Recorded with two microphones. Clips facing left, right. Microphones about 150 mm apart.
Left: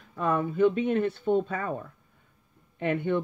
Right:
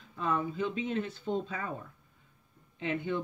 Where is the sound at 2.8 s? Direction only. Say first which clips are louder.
Left 6 dB; 55° left (ahead or behind).